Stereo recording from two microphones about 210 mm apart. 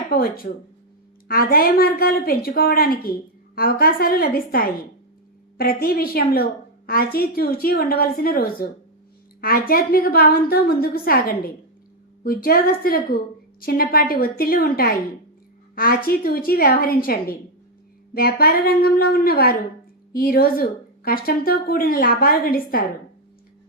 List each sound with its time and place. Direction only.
0.1 s a woman's voice: 45° left (ahead or behind)